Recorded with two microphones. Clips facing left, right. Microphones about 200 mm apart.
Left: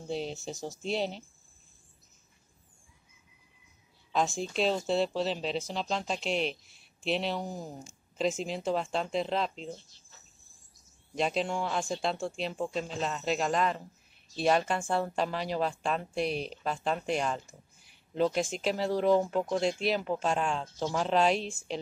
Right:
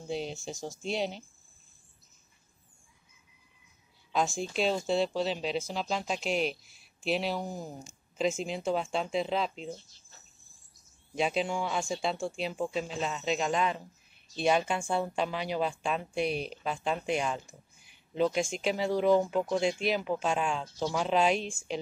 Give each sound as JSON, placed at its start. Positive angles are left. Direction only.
{"t": 0.1, "sound": "speech", "side_deg": 0}
{"t": 4.1, "sound": "speech", "side_deg": 0}
{"t": 11.1, "sound": "speech", "side_deg": 0}